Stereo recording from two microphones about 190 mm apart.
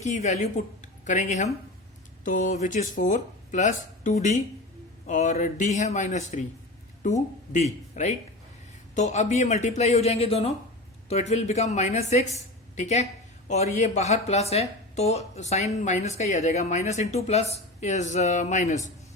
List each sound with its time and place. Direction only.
0.0 s speech: 35° left (ahead or behind)